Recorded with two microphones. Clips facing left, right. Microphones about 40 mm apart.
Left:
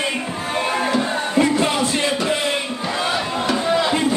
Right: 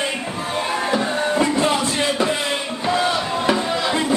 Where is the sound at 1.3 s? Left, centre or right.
Centre.